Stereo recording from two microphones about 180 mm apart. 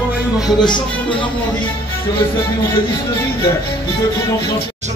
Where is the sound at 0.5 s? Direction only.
25° left (ahead or behind).